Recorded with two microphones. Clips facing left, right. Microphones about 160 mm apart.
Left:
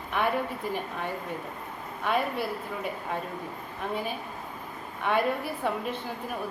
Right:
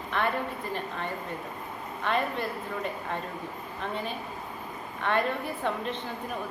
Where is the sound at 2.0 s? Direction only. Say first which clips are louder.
Left 1 dB; 10° left (ahead or behind).